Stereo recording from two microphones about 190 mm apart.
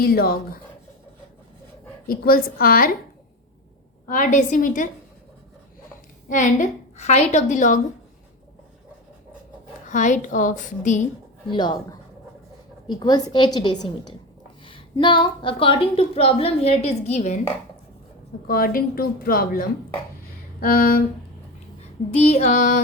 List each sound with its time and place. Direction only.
0.0 s speech: 55° left (ahead or behind)
2.0 s speech: 50° left (ahead or behind)
4.1 s speech: 40° left (ahead or behind)
6.2 s a woman's voice: 40° left (ahead or behind)
9.9 s a woman's voice: 40° left (ahead or behind)
11.5 s a woman's voice: 20° left (ahead or behind); by 17.4 s 40° left (ahead or behind)
18.4 s speech: 50° left (ahead or behind)
22.1 s a woman's voice: 35° left (ahead or behind)